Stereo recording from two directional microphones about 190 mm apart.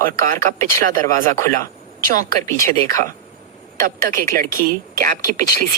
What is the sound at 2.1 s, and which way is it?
Speech, 45° right (ahead or behind).